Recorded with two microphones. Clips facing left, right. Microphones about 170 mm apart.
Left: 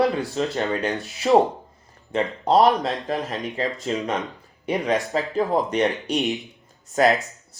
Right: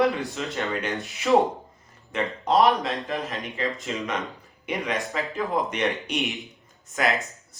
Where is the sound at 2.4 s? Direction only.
35° left (ahead or behind).